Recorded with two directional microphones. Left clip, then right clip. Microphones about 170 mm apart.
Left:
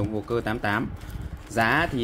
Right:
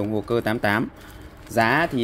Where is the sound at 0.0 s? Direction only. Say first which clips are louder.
Right 4 dB; 40° right (ahead or behind).